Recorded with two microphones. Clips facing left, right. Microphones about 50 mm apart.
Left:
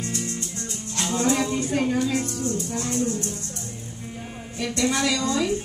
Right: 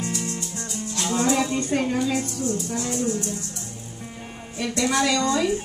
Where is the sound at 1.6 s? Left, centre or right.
Centre.